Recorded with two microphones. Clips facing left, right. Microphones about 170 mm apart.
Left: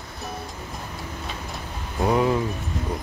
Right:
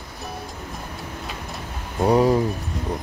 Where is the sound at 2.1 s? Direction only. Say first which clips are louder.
Right 4 dB; 35° right (ahead or behind).